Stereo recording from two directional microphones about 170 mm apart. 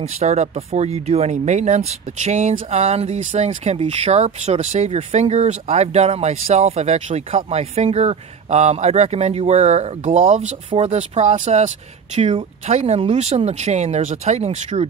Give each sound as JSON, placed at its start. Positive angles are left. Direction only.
{"t": 0.0, "sound": "speech", "side_deg": -40}